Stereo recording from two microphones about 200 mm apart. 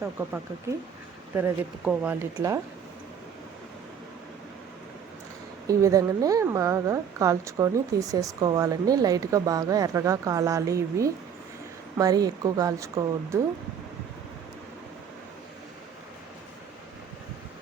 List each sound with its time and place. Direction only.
1.4 s a woman's voice: 5° right (ahead or behind)
5.6 s a woman's voice: 15° right (ahead or behind)